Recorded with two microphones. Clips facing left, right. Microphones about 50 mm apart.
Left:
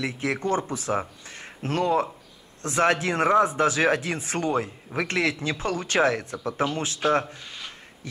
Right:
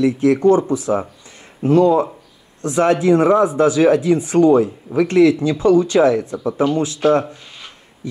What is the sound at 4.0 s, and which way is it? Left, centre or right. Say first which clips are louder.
Speech: right 13 dB; left.